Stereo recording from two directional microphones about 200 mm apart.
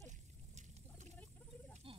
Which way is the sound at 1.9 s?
25° right (ahead or behind).